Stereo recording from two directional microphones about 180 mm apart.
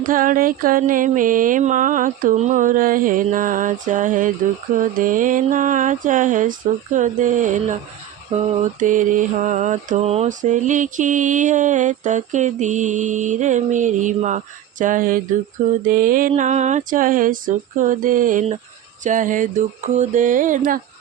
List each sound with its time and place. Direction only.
0.0 s mantra: 50° right (ahead or behind)